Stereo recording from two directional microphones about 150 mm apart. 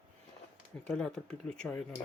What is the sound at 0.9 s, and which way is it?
Speech, 5° left (ahead or behind).